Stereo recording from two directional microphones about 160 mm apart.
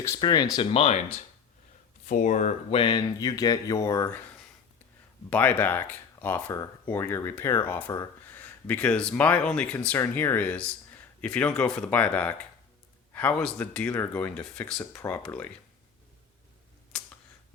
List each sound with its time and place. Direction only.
0.2 s speech: 25° left (ahead or behind)
2.0 s speech: 50° left (ahead or behind); by 4.2 s 20° left (ahead or behind)
5.3 s speech: 10° left (ahead or behind)
16.9 s camera: centre (ahead or behind)